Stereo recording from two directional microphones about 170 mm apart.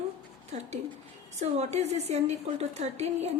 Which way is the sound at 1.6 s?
40° right (ahead or behind).